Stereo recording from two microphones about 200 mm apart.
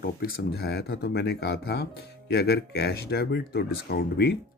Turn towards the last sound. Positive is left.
turn(degrees=50)  # may be behind; listen again after turning